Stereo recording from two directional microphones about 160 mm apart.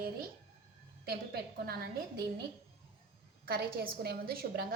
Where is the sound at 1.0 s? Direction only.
75° right (ahead or behind).